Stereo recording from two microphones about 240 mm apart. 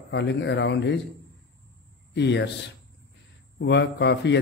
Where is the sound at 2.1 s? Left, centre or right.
Left.